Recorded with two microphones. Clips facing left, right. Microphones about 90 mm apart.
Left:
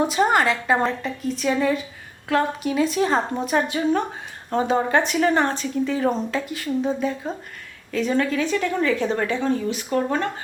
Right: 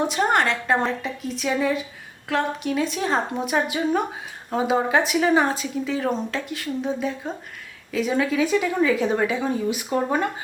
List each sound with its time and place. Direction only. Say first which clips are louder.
0.0 s speech: left 2 dB; centre (ahead or behind)